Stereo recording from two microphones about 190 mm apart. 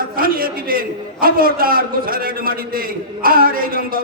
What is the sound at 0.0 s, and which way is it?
A man's voice, 50° right (ahead or behind).